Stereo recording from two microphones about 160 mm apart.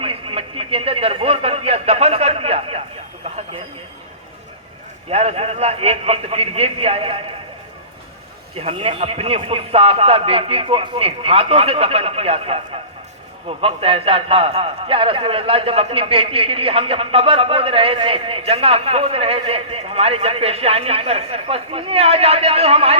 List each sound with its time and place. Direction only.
0.0 s a sound: 35° right (ahead or behind)
5.0 s a man's voice: 40° right (ahead or behind)
8.5 s a man's voice: 35° right (ahead or behind)